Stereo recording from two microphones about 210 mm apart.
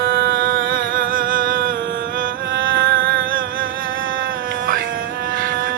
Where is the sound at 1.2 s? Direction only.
65° right (ahead or behind).